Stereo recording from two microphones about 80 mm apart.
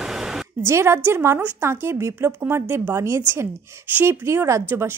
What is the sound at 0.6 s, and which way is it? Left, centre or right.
Speech, right.